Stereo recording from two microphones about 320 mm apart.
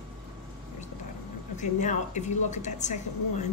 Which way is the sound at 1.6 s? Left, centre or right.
Left.